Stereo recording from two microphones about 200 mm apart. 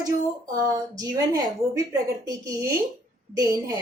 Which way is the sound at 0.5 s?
20° right (ahead or behind).